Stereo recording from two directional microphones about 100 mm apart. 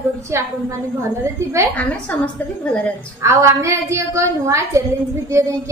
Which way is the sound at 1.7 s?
15° left (ahead or behind).